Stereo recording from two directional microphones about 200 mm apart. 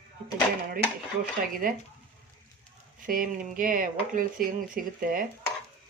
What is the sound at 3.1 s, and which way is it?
Speech, 45° right (ahead or behind).